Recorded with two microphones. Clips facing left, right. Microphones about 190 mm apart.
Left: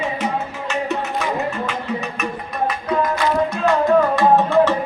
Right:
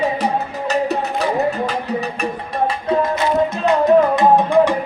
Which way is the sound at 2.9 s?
25° right (ahead or behind).